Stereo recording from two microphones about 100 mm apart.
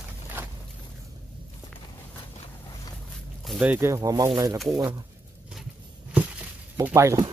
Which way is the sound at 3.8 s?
35° right (ahead or behind).